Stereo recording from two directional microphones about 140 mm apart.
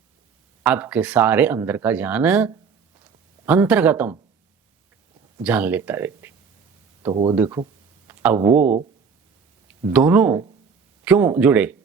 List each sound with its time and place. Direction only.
0.6 s speech: 10° right (ahead or behind)
5.4 s speech: 10° right (ahead or behind)
7.1 s speech: 30° right (ahead or behind)
7.3 s speech: 15° right (ahead or behind)
9.9 s speech: 10° right (ahead or behind)